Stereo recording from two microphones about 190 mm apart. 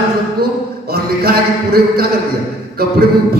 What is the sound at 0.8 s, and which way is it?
Speech, 55° right (ahead or behind).